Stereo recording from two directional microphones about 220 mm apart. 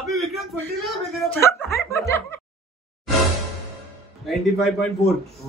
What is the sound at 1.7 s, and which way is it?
Snicker, 15° left (ahead or behind).